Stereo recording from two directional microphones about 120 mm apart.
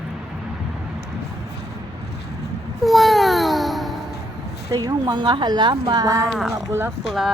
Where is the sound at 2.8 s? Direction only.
Centre (ahead or behind).